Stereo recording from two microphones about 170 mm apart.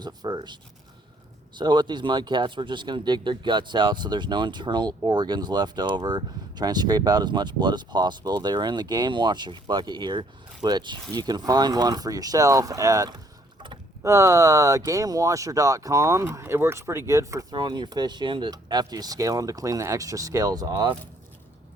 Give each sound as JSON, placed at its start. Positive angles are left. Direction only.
{"t": 0.0, "sound": "speech", "side_deg": -25}